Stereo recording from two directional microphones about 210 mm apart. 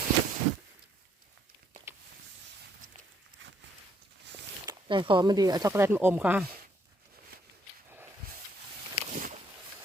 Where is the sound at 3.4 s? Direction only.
60° right (ahead or behind).